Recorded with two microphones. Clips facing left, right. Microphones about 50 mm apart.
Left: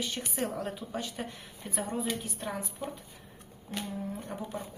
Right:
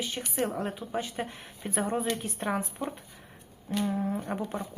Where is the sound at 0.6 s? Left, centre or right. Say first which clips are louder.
Right 3 dB; right.